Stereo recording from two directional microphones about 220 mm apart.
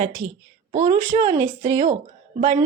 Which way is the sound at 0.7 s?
35° right (ahead or behind).